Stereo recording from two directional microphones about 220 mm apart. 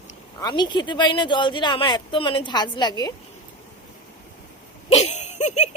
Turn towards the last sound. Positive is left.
turn(degrees=30)  # may be behind; listen again after turning